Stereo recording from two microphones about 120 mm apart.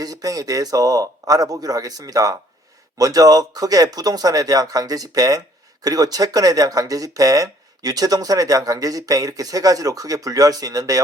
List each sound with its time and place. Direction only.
0.0 s speech: 30° right (ahead or behind)